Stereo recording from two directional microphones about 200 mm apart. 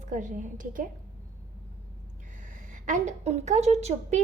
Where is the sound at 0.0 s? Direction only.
40° right (ahead or behind).